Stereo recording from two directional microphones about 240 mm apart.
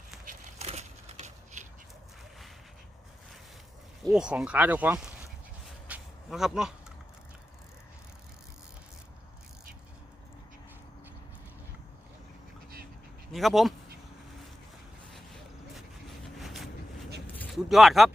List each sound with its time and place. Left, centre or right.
0.3 s a sound: right
4.1 s speech: centre
5.9 s a sound: centre
13.3 s speech: centre
16.2 s vehicle: centre
17.2 s speech: centre